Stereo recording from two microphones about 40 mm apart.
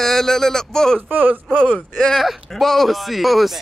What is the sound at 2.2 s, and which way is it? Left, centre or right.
Speech, centre.